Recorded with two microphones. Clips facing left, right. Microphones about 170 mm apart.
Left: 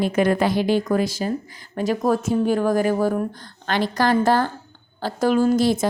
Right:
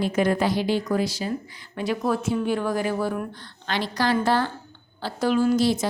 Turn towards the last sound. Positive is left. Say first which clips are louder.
# left 3 dB
turn(degrees=50)  # may be behind; listen again after turning